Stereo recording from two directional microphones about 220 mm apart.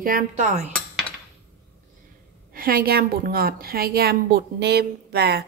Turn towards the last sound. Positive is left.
turn(degrees=-45)  # may be behind; listen again after turning